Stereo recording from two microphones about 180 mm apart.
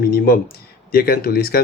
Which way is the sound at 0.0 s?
55° left (ahead or behind).